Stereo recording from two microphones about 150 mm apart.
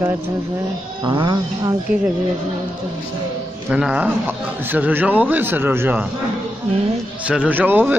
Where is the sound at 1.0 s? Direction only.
30° right (ahead or behind).